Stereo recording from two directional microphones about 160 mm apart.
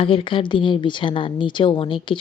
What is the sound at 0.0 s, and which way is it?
A woman's voice, 35° left (ahead or behind).